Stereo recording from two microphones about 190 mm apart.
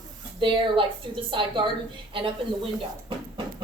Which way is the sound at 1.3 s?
25° right (ahead or behind).